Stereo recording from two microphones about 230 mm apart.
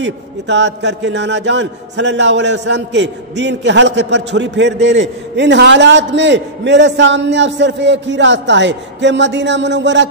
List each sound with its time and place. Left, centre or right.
0.0 s a man's voice: right